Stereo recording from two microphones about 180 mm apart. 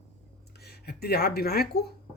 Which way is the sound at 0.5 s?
60° left (ahead or behind).